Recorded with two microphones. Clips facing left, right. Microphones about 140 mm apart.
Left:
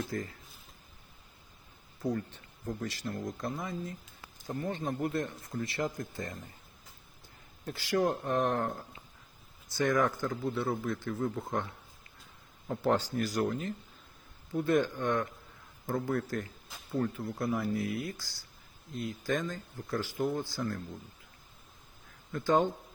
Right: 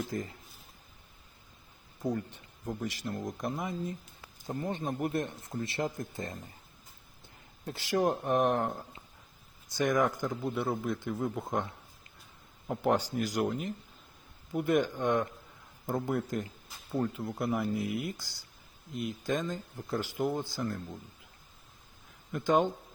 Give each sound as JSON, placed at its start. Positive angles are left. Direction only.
{"t": 0.1, "sound": "speech", "side_deg": -20}
{"t": 2.0, "sound": "speech", "side_deg": -15}
{"t": 7.6, "sound": "speech", "side_deg": -25}
{"t": 9.7, "sound": "speech", "side_deg": -20}
{"t": 22.3, "sound": "speech", "side_deg": -20}